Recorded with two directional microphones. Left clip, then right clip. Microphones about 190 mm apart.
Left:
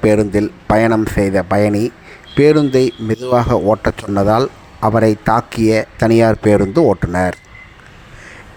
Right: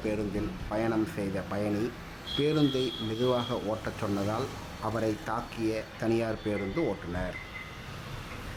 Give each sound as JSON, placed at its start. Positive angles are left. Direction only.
{"t": 0.1, "sound": "speech", "side_deg": 50}